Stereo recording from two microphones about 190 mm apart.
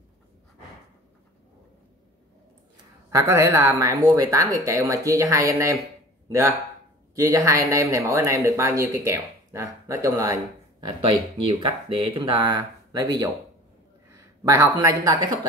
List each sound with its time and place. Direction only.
3.1 s speech: 15° right (ahead or behind)
14.4 s speech: 20° right (ahead or behind)